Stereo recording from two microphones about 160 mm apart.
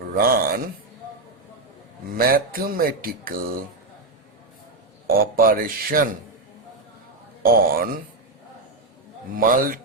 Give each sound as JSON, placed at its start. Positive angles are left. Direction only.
{"t": 0.1, "sound": "speech", "side_deg": -65}
{"t": 2.1, "sound": "mantra", "side_deg": -65}
{"t": 5.0, "sound": "mantra", "side_deg": -65}
{"t": 7.4, "sound": "speech", "side_deg": -70}
{"t": 9.4, "sound": "mantra", "side_deg": -60}